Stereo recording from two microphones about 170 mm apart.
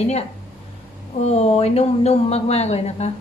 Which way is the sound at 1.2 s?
40° left (ahead or behind).